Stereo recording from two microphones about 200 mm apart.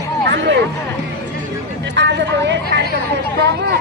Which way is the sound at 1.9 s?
60° right (ahead or behind).